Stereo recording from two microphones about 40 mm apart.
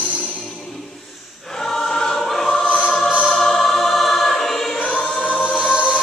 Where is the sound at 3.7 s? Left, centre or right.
Centre.